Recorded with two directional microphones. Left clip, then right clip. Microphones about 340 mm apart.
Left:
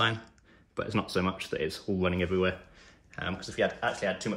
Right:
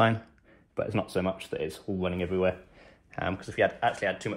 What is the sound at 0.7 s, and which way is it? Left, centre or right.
Speech, centre.